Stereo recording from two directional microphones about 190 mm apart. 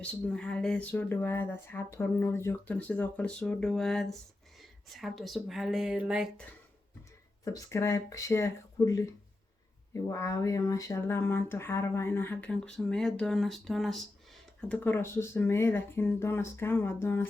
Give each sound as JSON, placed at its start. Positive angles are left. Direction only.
{"t": 0.0, "sound": "speech", "side_deg": 5}
{"t": 7.4, "sound": "speech", "side_deg": 15}
{"t": 14.7, "sound": "speech", "side_deg": 10}